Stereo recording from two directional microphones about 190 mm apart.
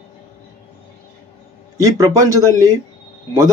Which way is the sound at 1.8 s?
15° right (ahead or behind).